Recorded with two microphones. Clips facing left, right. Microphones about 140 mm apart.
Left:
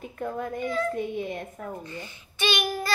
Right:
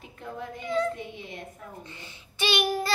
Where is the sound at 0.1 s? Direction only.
50° left (ahead or behind).